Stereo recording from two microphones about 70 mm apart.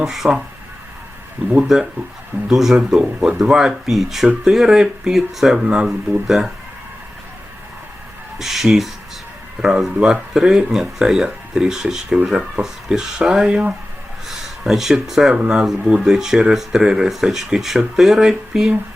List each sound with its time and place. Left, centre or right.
0.0 s speech: centre
1.5 s speech: centre
8.4 s speech: centre